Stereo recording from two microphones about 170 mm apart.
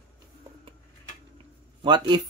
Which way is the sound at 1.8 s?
25° right (ahead or behind).